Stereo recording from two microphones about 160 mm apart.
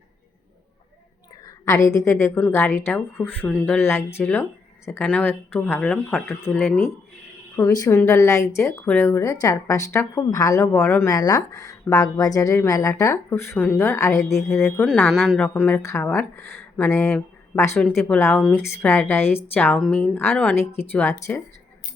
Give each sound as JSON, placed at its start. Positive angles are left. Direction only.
{"t": 1.5, "sound": "speech", "side_deg": 20}
{"t": 6.4, "sound": "speech", "side_deg": 15}
{"t": 14.8, "sound": "speech", "side_deg": 0}
{"t": 20.3, "sound": "speech", "side_deg": 0}
{"t": 20.6, "sound": "speech", "side_deg": 15}